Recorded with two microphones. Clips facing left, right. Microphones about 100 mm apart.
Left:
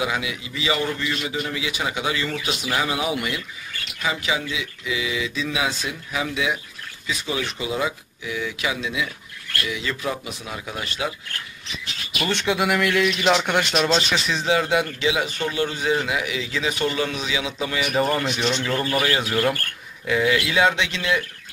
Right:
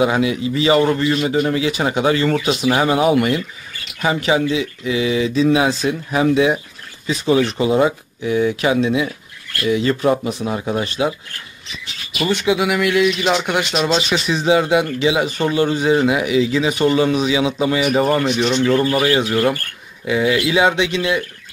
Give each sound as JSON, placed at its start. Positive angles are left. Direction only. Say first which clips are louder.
{"t": 0.0, "sound": "speech", "louder": "right 10 dB", "side_deg": -35}
{"t": 12.2, "sound": "speech", "louder": "right 5 dB", "side_deg": -5}
{"t": 18.4, "sound": "speech", "louder": "right 8 dB", "side_deg": -10}
{"t": 20.1, "sound": "speech", "louder": "right 4 dB", "side_deg": -15}